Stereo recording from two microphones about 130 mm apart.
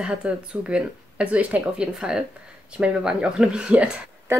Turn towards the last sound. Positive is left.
turn(degrees=-5)  # may be behind; listen again after turning